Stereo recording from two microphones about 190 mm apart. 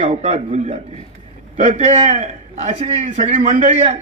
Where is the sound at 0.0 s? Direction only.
40° right (ahead or behind).